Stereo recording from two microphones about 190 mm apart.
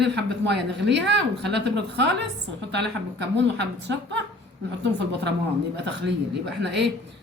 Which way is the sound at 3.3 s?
65° right (ahead or behind).